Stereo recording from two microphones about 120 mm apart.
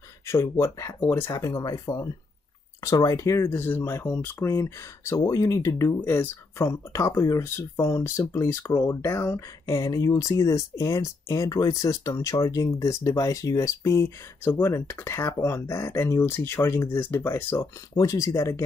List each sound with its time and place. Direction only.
0.3 s speech: 25° left (ahead or behind)